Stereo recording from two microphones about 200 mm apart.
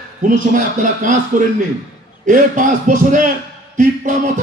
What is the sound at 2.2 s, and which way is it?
A man's voice, 40° right (ahead or behind).